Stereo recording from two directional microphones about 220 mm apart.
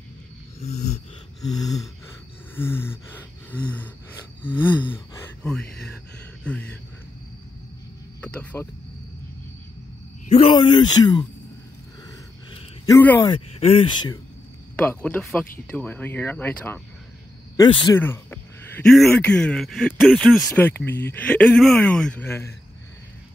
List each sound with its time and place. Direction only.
0.6 s a sound: 30° left (ahead or behind)
1.5 s speech: 15° left (ahead or behind)
2.5 s gasp: 10° left (ahead or behind)
4.9 s whispering: 5° left (ahead or behind)
6.5 s a sound: 5° left (ahead or behind)
8.2 s cricket: 5° left (ahead or behind)
10.3 s speech: 25° left (ahead or behind)
12.5 s a sound: 15° left (ahead or behind)
13.3 s speech: 25° left (ahead or behind)
14.8 s speech: 10° left (ahead or behind)
17.6 s speech: 20° left (ahead or behind)
17.9 s speech: 10° left (ahead or behind)